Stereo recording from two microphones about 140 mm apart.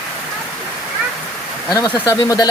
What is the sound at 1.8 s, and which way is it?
Speech, 30° left (ahead or behind).